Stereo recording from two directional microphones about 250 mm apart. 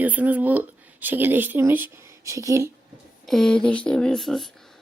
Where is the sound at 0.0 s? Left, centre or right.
Centre.